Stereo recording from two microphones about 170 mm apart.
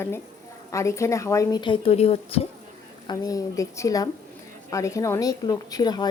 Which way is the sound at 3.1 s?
20° left (ahead or behind).